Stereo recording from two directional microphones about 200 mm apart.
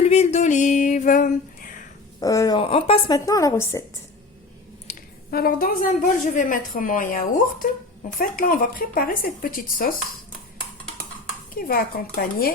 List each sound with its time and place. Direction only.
0.0 s a sound: 30° left (ahead or behind)
2.2 s a woman's voice: 15° left (ahead or behind)
2.6 s a woman's voice: 30° left (ahead or behind)
3.2 s a woman's voice: 15° left (ahead or behind)
4.9 s a woman's voice: 45° left (ahead or behind)
11.5 s a woman's voice: 45° left (ahead or behind)